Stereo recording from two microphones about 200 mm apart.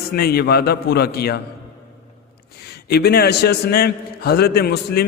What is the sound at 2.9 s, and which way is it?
A man's voice, 50° left (ahead or behind).